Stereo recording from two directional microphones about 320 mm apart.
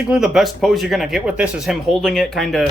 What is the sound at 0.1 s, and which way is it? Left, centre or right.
Speech, centre.